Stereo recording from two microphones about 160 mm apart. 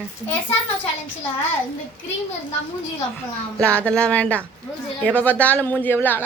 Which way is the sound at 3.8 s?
5° left (ahead or behind).